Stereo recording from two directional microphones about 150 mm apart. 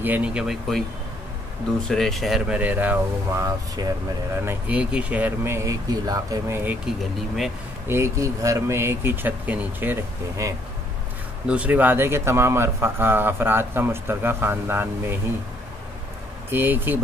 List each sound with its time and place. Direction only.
0.0 s speech: 10° right (ahead or behind)
1.9 s a man's voice: centre (ahead or behind); by 6.8 s 15° right (ahead or behind)
7.9 s a man's voice: 20° right (ahead or behind)
16.4 s a man's voice: 15° right (ahead or behind)